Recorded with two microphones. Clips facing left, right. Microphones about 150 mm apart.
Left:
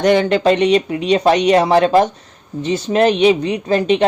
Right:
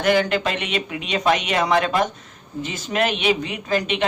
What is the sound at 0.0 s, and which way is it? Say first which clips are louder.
Speech: left 6 dB; 35° left (ahead or behind).